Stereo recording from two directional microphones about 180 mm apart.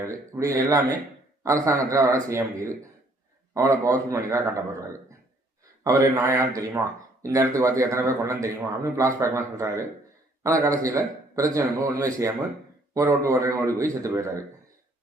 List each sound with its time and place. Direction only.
0.3 s speech: 15° right (ahead or behind)